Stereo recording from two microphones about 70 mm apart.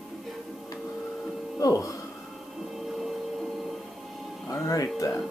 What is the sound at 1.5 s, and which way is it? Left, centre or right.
Speech, left.